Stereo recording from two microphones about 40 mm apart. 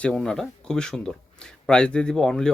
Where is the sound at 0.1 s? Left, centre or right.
Centre.